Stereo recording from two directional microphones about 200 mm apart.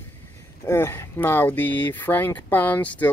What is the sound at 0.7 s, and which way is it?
Speech, 10° left (ahead or behind).